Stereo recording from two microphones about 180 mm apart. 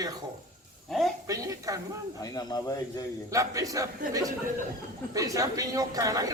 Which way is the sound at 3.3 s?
20° right (ahead or behind).